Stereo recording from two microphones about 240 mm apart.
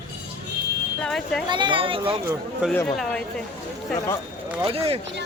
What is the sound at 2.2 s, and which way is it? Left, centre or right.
Speech, centre.